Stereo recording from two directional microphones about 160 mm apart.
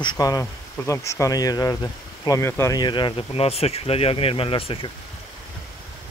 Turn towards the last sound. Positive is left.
turn(degrees=35)  # may be behind; listen again after turning